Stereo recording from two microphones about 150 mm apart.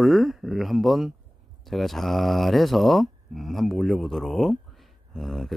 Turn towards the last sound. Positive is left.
turn(degrees=0)  # may be behind; listen again after turning